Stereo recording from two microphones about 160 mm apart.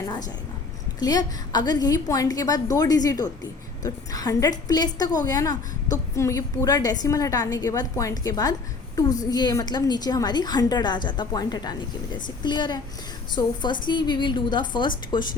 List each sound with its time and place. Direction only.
0.9 s a woman's voice: 25° left (ahead or behind)